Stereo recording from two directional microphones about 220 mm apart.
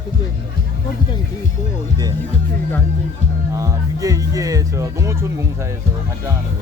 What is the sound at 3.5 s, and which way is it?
Speech, 15° right (ahead or behind).